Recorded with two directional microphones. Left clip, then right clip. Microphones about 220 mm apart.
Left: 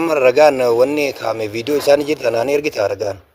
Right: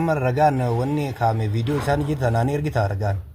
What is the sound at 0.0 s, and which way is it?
A man's voice, 45° left (ahead or behind).